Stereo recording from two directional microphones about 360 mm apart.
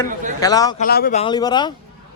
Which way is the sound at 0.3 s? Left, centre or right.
Centre.